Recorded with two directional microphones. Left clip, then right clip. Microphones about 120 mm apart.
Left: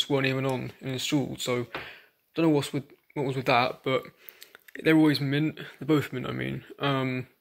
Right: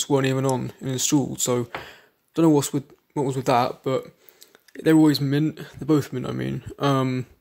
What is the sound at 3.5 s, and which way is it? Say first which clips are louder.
Speech: right 2 dB; 40° right (ahead or behind).